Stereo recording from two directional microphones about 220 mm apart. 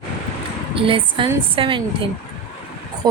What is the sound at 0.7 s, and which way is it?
Speech, 25° right (ahead or behind).